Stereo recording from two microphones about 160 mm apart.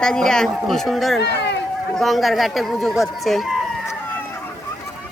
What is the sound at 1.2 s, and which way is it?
Speech, 90° left.